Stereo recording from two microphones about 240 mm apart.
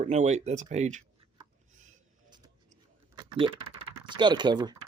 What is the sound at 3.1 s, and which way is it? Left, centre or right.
Speech, right.